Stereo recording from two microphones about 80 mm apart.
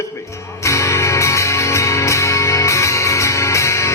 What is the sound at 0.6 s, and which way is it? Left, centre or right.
Music, left.